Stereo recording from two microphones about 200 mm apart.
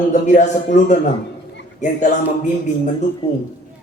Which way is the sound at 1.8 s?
35° left (ahead or behind).